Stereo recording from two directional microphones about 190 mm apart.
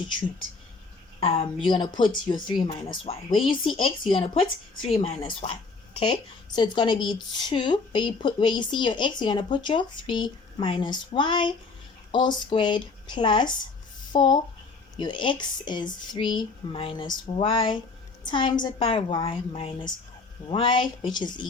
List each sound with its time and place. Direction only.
1.2 s a woman's voice: 30° left (ahead or behind)